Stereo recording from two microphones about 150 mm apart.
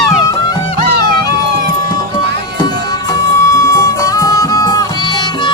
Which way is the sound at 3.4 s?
20° left (ahead or behind).